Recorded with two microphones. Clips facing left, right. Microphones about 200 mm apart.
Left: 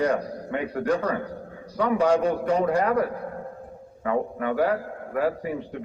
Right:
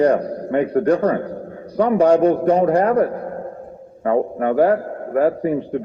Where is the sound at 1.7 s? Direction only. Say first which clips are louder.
Right 7 dB; 55° right (ahead or behind).